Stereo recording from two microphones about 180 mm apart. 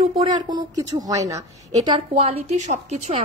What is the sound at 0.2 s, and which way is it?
A woman's voice, 20° right (ahead or behind).